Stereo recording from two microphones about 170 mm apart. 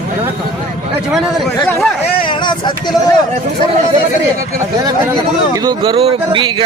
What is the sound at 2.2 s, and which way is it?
Speech, 25° left (ahead or behind).